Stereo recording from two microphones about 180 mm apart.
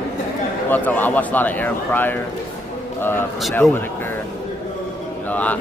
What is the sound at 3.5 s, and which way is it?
Speech, 10° left (ahead or behind).